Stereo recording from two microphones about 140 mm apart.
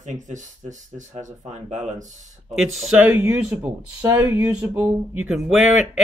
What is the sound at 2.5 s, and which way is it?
Speech, 5° right (ahead or behind).